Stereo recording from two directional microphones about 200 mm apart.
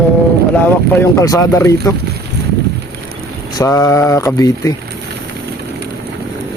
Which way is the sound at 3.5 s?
15° left (ahead or behind).